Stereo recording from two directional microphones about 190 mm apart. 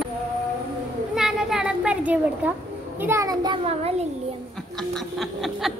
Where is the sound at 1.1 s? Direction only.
5° right (ahead or behind).